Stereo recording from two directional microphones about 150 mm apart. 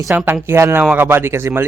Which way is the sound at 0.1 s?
10° right (ahead or behind).